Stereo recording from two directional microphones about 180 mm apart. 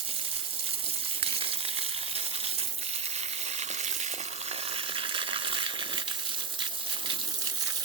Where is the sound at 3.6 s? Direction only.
40° right (ahead or behind).